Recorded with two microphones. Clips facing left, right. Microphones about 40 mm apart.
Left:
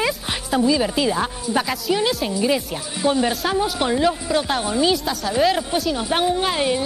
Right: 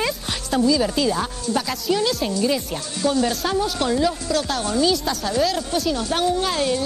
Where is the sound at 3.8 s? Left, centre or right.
Left.